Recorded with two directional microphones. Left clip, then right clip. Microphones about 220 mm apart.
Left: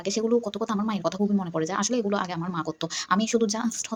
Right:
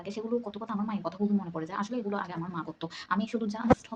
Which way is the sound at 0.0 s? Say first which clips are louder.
Left 9 dB; 30° left (ahead or behind).